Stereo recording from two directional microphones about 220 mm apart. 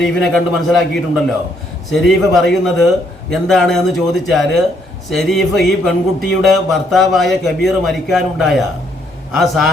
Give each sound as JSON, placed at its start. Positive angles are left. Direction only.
{"t": 0.0, "sound": "a man's voice", "side_deg": 0}